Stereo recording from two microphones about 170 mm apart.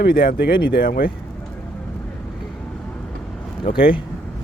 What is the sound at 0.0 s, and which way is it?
Speech, 65° left (ahead or behind).